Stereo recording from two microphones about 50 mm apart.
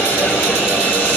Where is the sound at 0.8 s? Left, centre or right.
Left.